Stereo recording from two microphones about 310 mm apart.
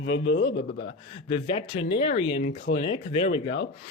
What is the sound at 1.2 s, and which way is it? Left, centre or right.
Speech, centre.